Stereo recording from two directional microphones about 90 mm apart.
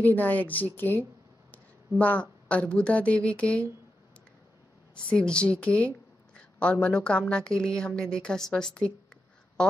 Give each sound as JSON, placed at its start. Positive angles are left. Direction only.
{"t": 0.0, "sound": "a woman's voice", "side_deg": 20}
{"t": 4.9, "sound": "a woman's voice", "side_deg": 10}